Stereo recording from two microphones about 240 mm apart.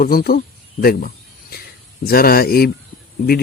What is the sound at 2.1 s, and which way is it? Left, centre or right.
Speech, left.